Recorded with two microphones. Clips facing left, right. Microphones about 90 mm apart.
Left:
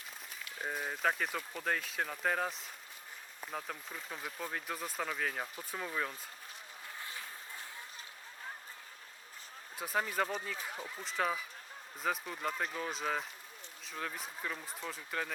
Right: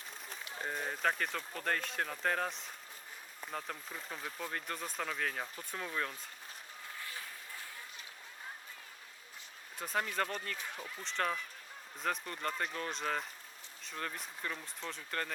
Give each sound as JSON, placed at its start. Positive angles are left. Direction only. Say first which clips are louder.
{"t": 0.6, "sound": "speech", "louder": "left 1 dB", "side_deg": 5}
{"t": 9.7, "sound": "speech", "louder": "left 1 dB", "side_deg": 5}